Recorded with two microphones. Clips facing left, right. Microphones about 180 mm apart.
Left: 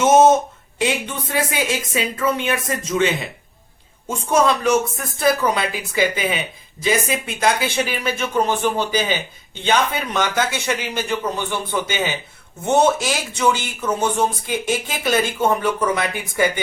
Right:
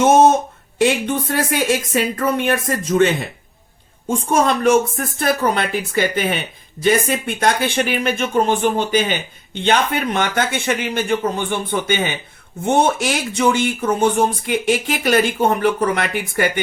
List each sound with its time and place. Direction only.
0.8 s speech: 60° right (ahead or behind)